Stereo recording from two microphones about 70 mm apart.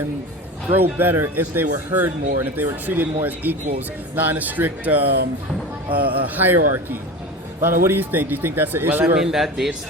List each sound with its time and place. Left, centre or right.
0.7 s speech: right
9.1 s speech: centre